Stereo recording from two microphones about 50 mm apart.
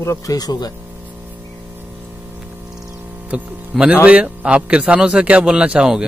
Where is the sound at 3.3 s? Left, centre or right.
Right.